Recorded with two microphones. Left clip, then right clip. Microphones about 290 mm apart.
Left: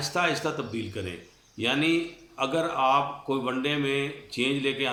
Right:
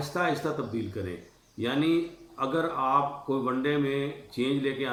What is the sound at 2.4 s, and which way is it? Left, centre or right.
Speech, centre.